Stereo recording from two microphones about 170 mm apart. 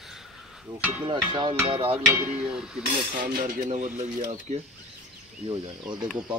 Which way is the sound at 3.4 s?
50° right (ahead or behind).